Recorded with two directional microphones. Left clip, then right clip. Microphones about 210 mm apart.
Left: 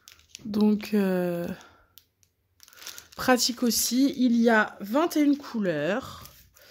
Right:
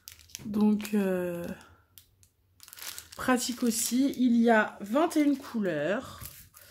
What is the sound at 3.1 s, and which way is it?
A woman's voice, 45° left (ahead or behind).